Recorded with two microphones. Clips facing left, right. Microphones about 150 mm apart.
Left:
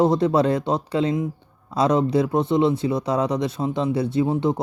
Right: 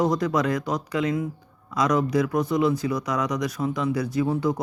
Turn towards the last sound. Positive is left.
turn(degrees=25)  # may be behind; listen again after turning